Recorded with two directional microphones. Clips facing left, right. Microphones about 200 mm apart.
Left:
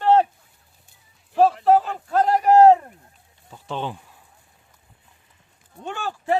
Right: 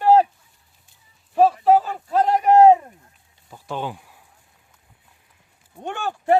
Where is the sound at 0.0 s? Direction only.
5° right (ahead or behind).